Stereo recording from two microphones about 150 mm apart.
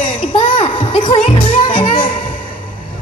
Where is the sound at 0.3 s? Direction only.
35° left (ahead or behind).